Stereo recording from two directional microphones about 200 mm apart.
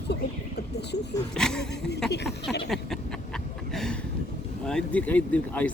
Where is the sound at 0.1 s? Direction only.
55° left (ahead or behind).